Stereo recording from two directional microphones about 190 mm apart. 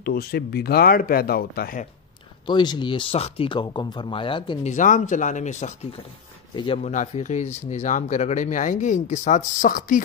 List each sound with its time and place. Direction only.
0.0 s speech: 55° left (ahead or behind)
2.4 s speech: 25° left (ahead or behind)
4.6 s speech: 40° left (ahead or behind)
6.5 s speech: 25° left (ahead or behind)
6.8 s speech: 40° left (ahead or behind)